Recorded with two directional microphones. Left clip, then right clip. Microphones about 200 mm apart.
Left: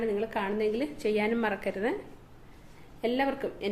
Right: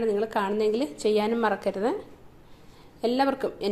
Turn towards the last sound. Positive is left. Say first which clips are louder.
# right 5 dB
turn(degrees=-30)  # may be behind; listen again after turning